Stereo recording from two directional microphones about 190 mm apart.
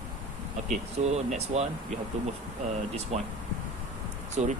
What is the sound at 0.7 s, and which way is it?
Speech, 35° right (ahead or behind).